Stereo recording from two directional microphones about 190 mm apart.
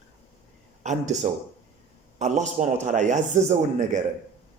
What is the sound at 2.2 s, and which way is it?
A man's voice, 40° right (ahead or behind).